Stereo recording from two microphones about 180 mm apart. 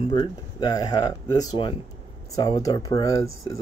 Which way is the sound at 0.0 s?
25° left (ahead or behind).